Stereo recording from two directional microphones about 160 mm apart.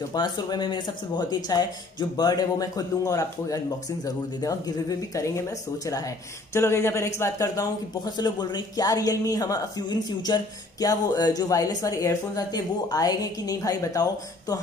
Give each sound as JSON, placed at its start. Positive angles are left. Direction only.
{"t": 0.1, "sound": "speech", "side_deg": 25}
{"t": 6.5, "sound": "speech", "side_deg": 15}